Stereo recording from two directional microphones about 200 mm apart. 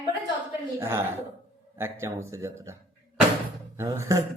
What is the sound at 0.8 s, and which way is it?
Speech, 15° right (ahead or behind).